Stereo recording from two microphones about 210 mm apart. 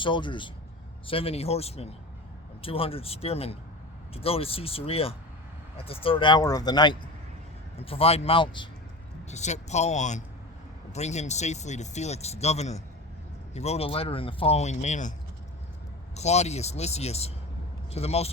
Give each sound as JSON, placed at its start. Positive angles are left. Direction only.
{"t": 0.0, "sound": "speech", "side_deg": 20}
{"t": 16.1, "sound": "speech", "side_deg": 30}